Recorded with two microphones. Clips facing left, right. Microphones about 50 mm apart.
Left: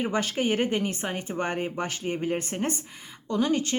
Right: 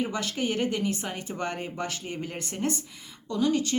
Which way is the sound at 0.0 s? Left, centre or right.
Left.